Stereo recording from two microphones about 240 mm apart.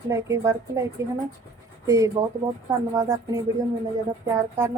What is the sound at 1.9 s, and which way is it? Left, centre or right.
Speech, centre.